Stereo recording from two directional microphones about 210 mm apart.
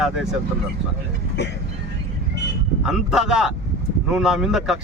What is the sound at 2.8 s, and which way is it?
Speech, 5° right (ahead or behind).